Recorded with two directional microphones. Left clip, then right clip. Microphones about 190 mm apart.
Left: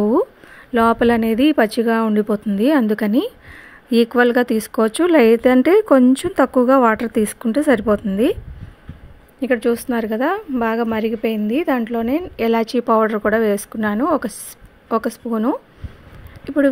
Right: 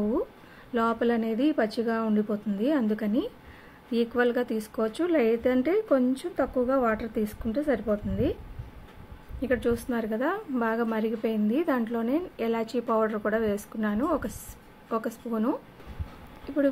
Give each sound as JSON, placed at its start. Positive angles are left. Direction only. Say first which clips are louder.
{"t": 0.7, "sound": "speech", "louder": "left 11 dB", "side_deg": 45}
{"t": 9.4, "sound": "a woman's voice", "louder": "left 9 dB", "side_deg": 40}
{"t": 16.4, "sound": "speech", "louder": "left 9 dB", "side_deg": 50}